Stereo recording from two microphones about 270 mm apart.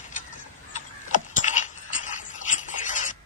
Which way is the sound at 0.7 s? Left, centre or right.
Left.